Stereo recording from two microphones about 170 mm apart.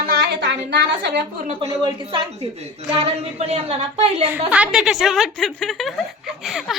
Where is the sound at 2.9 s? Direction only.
35° right (ahead or behind).